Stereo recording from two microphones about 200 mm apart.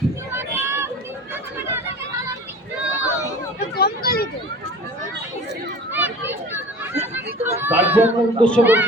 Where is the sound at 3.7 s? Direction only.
50° left (ahead or behind).